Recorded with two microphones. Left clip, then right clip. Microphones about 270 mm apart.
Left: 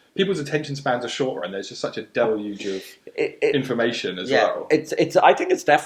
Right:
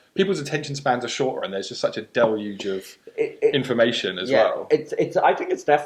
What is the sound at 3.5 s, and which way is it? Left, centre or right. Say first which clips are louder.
Speech: right 2 dB; right.